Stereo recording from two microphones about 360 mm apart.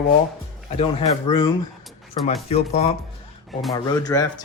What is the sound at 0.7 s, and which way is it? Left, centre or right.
Speech, centre.